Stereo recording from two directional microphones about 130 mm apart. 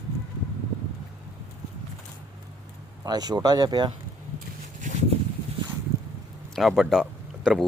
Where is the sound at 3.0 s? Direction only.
30° right (ahead or behind).